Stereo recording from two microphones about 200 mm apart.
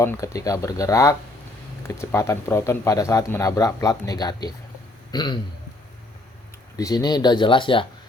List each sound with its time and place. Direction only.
0.0 s speech: 15° left (ahead or behind)
6.7 s speech: 20° left (ahead or behind)